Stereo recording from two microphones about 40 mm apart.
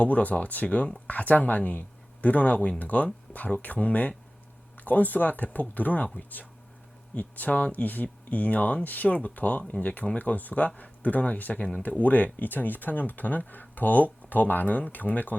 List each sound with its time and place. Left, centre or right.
0.0 s speech: left
11.5 s speech: left
11.8 s speech: left